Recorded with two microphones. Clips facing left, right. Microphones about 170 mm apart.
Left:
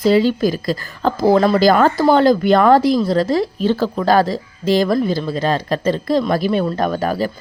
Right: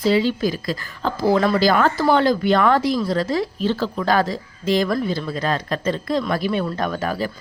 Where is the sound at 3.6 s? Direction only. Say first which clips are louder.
Left 4 dB; 45° left (ahead or behind).